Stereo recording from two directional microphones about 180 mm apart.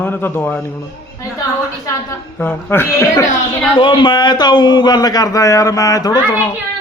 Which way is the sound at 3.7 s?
25° left (ahead or behind).